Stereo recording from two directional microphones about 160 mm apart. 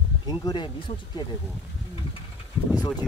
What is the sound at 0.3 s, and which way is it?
Speech, 25° left (ahead or behind).